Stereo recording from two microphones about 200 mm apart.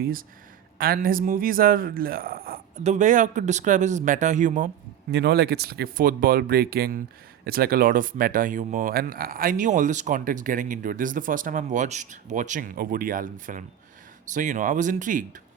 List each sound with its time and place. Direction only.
0.0 s speech: 45° right (ahead or behind)
5.1 s speech: 55° right (ahead or behind)